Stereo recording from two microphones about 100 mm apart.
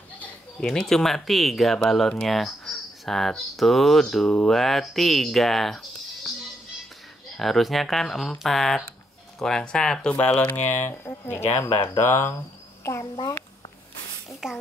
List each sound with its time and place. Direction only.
0.6 s speech: 5° left (ahead or behind)
7.3 s speech: centre (ahead or behind); by 12.4 s 25° left (ahead or behind)
13.0 s a child's voice: 40° left (ahead or behind)
14.4 s speech: 5° right (ahead or behind)